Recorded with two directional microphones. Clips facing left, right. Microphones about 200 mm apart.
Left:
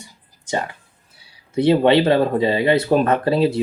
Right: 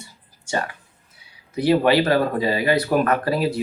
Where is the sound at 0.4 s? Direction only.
20° left (ahead or behind).